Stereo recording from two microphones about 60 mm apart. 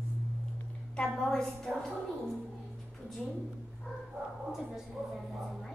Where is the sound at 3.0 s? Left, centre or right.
Centre.